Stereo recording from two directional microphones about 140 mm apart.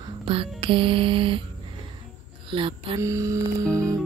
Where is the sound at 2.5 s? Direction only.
40° right (ahead or behind).